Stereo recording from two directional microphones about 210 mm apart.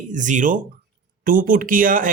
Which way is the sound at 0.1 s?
35° right (ahead or behind).